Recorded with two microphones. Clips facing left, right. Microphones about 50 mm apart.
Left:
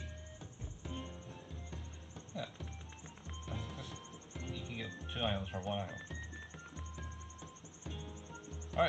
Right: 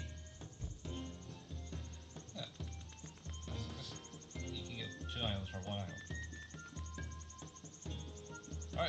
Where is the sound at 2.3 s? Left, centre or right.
Left.